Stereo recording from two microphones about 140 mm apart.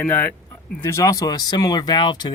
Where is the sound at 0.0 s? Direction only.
15° left (ahead or behind).